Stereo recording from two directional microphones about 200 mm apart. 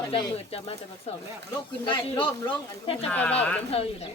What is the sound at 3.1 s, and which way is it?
Speech, 10° left (ahead or behind).